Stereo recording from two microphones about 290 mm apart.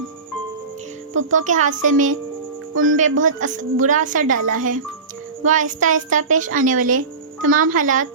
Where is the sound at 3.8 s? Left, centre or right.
Right.